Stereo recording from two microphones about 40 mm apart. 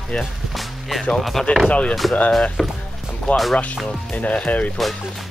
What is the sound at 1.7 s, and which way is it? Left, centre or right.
Speech, left.